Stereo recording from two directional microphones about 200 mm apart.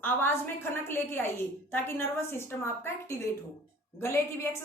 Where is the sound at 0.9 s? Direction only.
10° left (ahead or behind).